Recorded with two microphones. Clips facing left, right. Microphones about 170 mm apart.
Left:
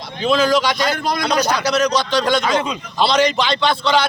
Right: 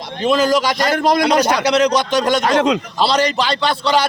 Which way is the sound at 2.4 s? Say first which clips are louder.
Right 5 dB; 75° right (ahead or behind).